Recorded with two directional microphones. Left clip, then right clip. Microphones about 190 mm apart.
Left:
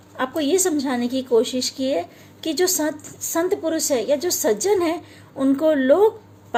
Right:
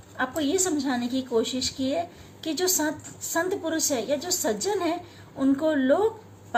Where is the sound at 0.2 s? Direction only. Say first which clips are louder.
Left 5 dB; 35° left (ahead or behind).